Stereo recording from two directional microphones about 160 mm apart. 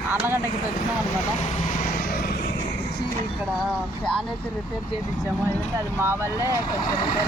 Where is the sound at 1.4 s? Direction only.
50° left (ahead or behind).